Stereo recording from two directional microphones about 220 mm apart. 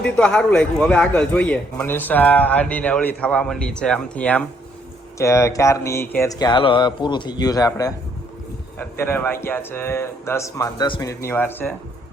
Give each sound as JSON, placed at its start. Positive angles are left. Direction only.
{"t": 0.0, "sound": "a man's voice", "side_deg": 5}